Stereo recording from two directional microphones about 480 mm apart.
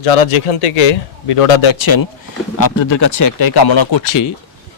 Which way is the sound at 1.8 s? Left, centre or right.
Left.